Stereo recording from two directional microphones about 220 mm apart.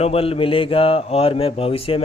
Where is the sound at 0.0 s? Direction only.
25° left (ahead or behind).